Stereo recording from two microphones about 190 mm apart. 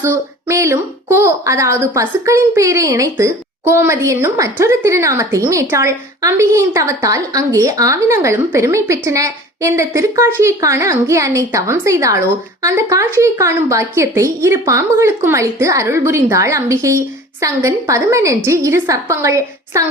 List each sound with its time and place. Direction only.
0.0 s a woman's voice: 15° right (ahead or behind)